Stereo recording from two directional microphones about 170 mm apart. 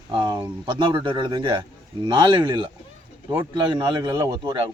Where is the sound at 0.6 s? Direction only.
25° right (ahead or behind).